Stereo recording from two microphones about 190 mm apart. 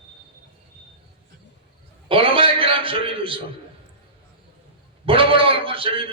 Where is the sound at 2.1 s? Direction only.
30° right (ahead or behind).